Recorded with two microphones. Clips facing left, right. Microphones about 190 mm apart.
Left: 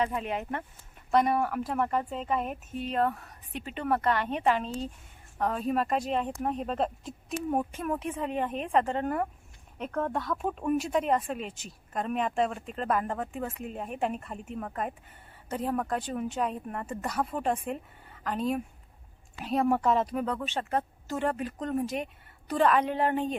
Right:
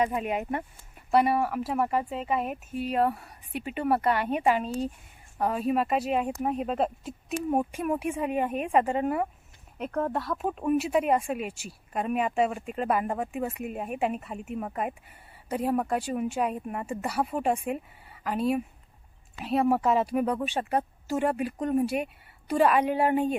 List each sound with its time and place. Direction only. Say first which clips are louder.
0.0 s speech: right 3 dB; 10° right (ahead or behind)